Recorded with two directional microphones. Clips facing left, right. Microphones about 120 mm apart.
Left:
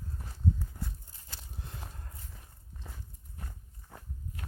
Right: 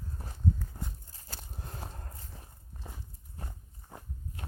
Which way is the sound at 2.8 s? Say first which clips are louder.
Right 3 dB; 20° right (ahead or behind).